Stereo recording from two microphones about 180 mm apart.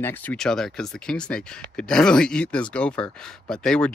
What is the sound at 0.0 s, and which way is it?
Speech, 5° left (ahead or behind).